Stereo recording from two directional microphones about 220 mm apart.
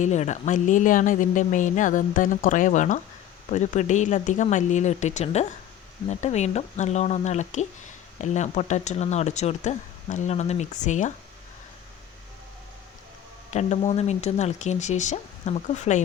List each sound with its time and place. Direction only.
0.0 s speech: 30° left (ahead or behind)
13.5 s speech: 30° left (ahead or behind)